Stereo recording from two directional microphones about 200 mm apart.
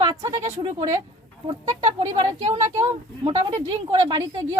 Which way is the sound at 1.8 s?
35° right (ahead or behind).